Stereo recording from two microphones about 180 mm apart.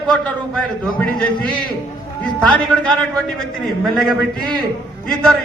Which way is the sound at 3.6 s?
Centre (ahead or behind).